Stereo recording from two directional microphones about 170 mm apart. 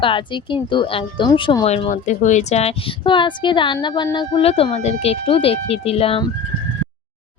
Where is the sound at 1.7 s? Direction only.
45° left (ahead or behind).